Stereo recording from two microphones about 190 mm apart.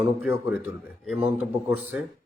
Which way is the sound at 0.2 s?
5° right (ahead or behind).